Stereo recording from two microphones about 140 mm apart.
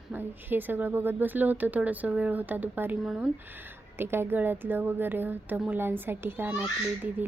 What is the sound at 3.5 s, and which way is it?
Speech, 15° right (ahead or behind).